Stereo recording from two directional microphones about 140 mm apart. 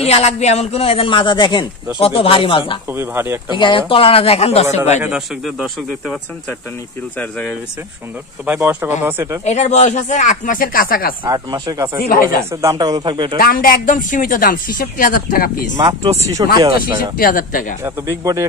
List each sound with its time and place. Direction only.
0.0 s a woman's voice: 50° left (ahead or behind)
2.9 s speech: 15° right (ahead or behind)
3.5 s a woman's voice: 35° left (ahead or behind)
5.0 s speech: 5° right (ahead or behind)
7.2 s speech: 10° left (ahead or behind)
8.5 s speech: 15° right (ahead or behind)
9.4 s speech: 50° left (ahead or behind); by 11.1 s 90° left
11.2 s speech: 25° right (ahead or behind)
12.0 s a man's voice: 85° left
12.4 s speech: 25° right (ahead or behind)
13.4 s a man's voice: 90° left
15.8 s speech: 35° right (ahead or behind)
17.2 s a man's voice: 85° left
17.8 s speech: 20° right (ahead or behind)